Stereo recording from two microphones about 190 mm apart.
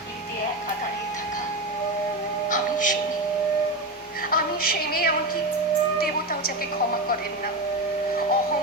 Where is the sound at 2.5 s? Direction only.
45° left (ahead or behind).